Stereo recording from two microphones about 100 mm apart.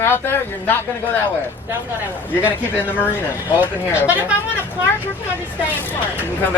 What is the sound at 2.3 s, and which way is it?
Speech, 20° left (ahead or behind).